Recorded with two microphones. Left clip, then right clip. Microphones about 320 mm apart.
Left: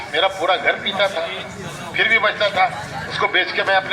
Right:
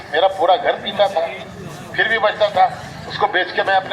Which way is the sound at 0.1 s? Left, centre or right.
Right.